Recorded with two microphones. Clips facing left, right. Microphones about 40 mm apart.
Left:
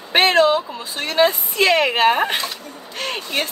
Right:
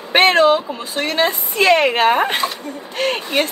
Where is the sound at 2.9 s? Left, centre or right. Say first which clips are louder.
Right 5 dB; right.